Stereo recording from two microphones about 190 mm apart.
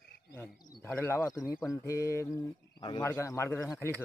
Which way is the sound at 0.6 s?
10° left (ahead or behind).